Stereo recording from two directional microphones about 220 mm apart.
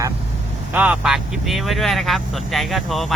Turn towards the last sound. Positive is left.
turn(degrees=0)  # may be behind; listen again after turning